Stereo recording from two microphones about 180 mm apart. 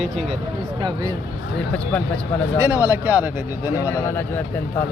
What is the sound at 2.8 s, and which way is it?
Speech, 10° right (ahead or behind).